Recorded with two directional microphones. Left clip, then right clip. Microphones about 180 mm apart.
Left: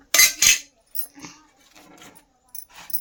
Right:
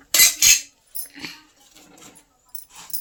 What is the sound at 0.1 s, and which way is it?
Cutlery, 25° left (ahead or behind).